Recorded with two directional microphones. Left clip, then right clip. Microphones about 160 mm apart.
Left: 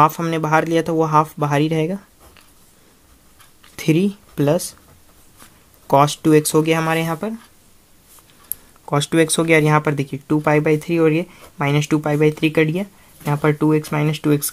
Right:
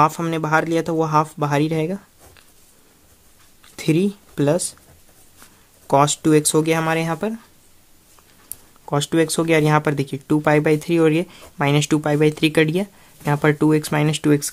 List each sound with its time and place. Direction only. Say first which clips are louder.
0.0 s speech: left 2 dB; 5° right (ahead or behind)
3.7 s speech: left 1 dB; centre (ahead or behind)
5.9 s speech: left 2 dB; 10° right (ahead or behind)
8.8 s speech: left 2 dB; 5° right (ahead or behind); by 14.4 s 25° right (ahead or behind)